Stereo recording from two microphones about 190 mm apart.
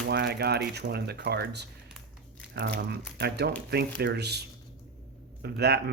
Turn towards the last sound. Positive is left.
turn(degrees=-60)  # may be behind; listen again after turning